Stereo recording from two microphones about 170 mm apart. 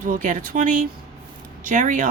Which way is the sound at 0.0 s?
55° right (ahead or behind).